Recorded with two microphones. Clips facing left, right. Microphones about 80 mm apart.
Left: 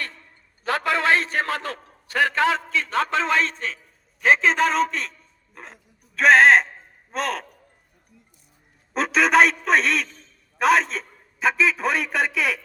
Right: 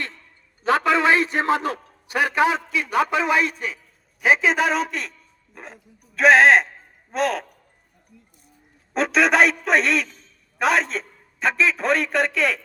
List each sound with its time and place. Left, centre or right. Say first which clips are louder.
0.6 s a man's voice: right 4 dB; right; by 7.4 s centre
8.9 s a man's voice: right 1 dB; centre